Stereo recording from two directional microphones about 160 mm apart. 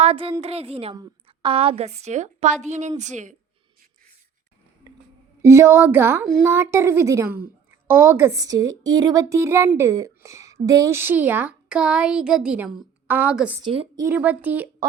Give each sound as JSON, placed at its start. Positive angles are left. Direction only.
{"t": 0.0, "sound": "a woman's voice", "side_deg": -35}
{"t": 0.9, "sound": "a woman's voice", "side_deg": -25}
{"t": 4.9, "sound": "a sound", "side_deg": -25}
{"t": 5.4, "sound": "a woman's voice", "side_deg": -15}
{"t": 13.7, "sound": "a woman's voice", "side_deg": -30}
{"t": 14.0, "sound": "speech", "side_deg": -10}